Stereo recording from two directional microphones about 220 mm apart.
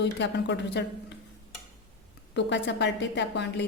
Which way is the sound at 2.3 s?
50° left (ahead or behind).